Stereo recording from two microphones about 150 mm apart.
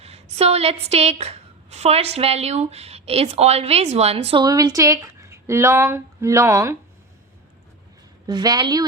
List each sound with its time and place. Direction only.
0.0 s a woman's voice: 45° right (ahead or behind)
4.4 s speech: 25° right (ahead or behind)
8.3 s speech: 25° right (ahead or behind)